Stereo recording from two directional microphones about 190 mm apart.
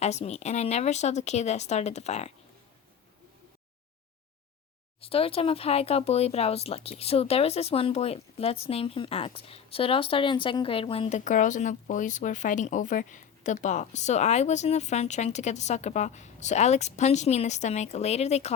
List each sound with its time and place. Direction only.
0.0 s speech: 35° left (ahead or behind)
4.9 s speech: 30° left (ahead or behind)
11.2 s speech: 40° left (ahead or behind)